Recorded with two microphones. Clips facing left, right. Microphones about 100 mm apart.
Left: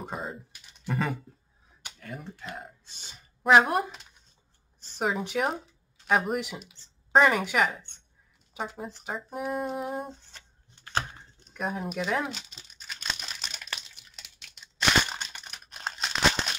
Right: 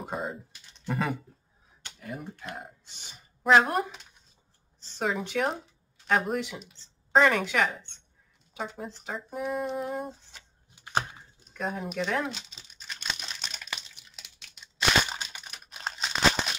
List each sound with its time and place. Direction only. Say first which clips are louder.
0.0 s speech: right 2 dB; centre (ahead or behind)
2.6 s speech: even; 15° right (ahead or behind)
3.4 s speech: left 1 dB; 5° left (ahead or behind); by 11.1 s 15° right (ahead or behind)
11.5 s crumpling: even; centre (ahead or behind)